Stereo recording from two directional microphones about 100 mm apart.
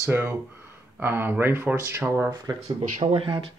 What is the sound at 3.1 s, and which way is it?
Speech, 60° right (ahead or behind).